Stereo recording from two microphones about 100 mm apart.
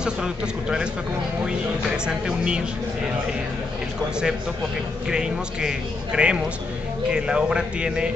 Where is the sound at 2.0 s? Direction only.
10° right (ahead or behind).